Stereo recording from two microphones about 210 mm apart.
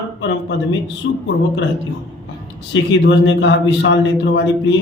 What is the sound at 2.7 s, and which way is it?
A man's voice, 60° left (ahead or behind).